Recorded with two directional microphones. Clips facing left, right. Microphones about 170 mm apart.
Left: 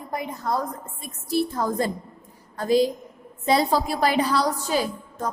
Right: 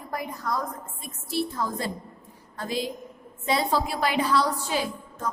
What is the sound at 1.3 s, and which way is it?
A woman's voice, 45° left (ahead or behind).